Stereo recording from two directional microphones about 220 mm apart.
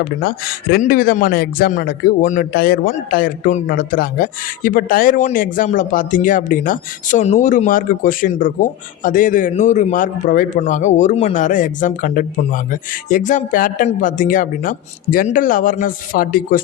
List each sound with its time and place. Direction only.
0.0 s speech: 45° left (ahead or behind)